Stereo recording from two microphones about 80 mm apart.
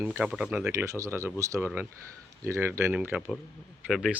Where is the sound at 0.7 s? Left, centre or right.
Right.